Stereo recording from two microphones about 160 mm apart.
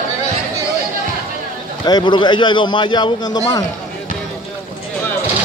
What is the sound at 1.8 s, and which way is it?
A man's voice, 25° left (ahead or behind).